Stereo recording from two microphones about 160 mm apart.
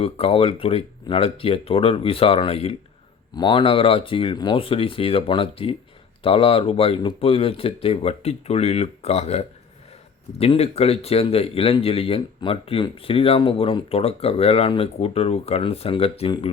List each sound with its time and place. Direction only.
0.0 s speech: 35° left (ahead or behind)